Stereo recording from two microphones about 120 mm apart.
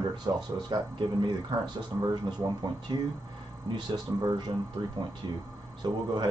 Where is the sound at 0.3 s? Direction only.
30° right (ahead or behind).